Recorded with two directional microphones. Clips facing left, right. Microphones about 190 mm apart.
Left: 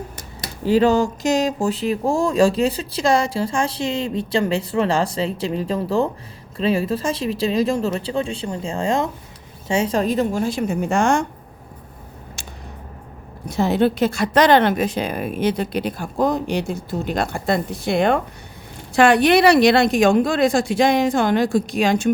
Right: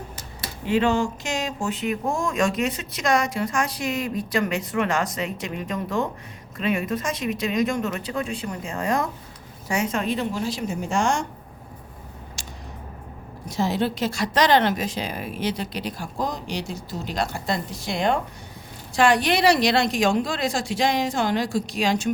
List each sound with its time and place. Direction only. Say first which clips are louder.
0.6 s a woman's voice: left 5 dB; 35° left (ahead or behind); by 11.3 s 60° left (ahead or behind)
13.5 s speech: left 6 dB; 60° left (ahead or behind)